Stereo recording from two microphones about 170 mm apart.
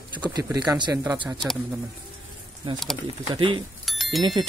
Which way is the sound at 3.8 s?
Centre (ahead or behind).